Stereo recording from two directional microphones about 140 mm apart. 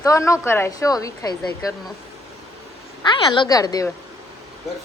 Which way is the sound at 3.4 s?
25° left (ahead or behind).